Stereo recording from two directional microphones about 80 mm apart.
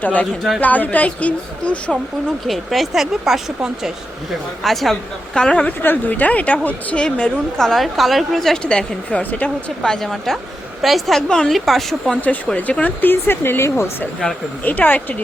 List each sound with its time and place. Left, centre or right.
0.0 s speech: centre
2.5 s a woman's voice: centre
5.8 s a woman's voice: left; by 12.1 s centre
12.5 s speech: centre; by 13.9 s left
14.6 s speech: left